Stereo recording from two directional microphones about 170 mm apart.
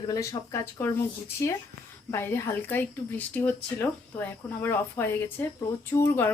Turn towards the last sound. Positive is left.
turn(degrees=15)  # may be behind; listen again after turning